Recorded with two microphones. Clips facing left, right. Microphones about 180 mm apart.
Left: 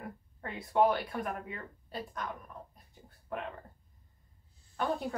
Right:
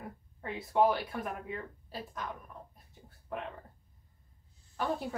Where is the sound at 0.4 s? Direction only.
Centre (ahead or behind).